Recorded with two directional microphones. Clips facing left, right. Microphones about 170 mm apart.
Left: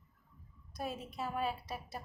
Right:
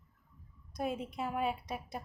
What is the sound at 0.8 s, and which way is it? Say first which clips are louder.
A woman's voice: right 4 dB; 15° right (ahead or behind).